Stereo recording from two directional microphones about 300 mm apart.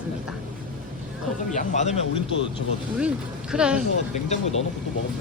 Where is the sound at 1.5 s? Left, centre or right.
Left.